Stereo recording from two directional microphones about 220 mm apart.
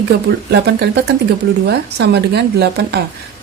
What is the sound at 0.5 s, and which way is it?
A woman's voice, 50° right (ahead or behind).